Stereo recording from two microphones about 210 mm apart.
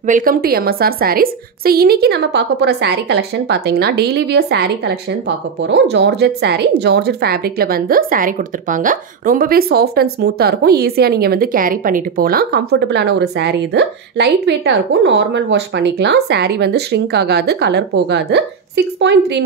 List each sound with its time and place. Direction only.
0.0 s a woman's voice: 40° right (ahead or behind); by 19.4 s 55° right (ahead or behind)